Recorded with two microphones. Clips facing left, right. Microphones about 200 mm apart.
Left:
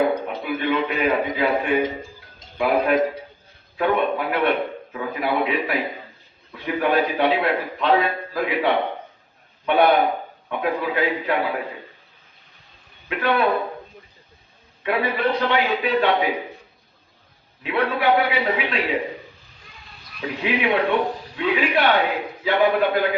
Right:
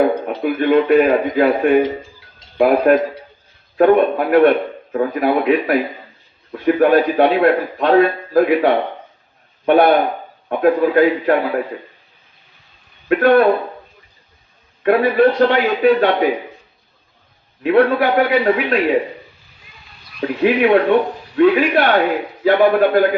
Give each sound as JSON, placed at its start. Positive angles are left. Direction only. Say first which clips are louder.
{"t": 0.3, "sound": "a man's voice", "louder": "right 8 dB", "side_deg": -50}
{"t": 13.1, "sound": "a man's voice", "louder": "right 9 dB", "side_deg": -50}
{"t": 14.8, "sound": "a man's voice", "louder": "right 9 dB", "side_deg": -50}
{"t": 17.6, "sound": "a man's voice", "louder": "right 9 dB", "side_deg": -45}
{"t": 20.2, "sound": "a man's voice", "louder": "right 9 dB", "side_deg": -50}